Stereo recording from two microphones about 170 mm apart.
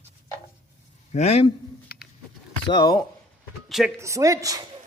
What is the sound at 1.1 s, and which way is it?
Speech, 40° left (ahead or behind).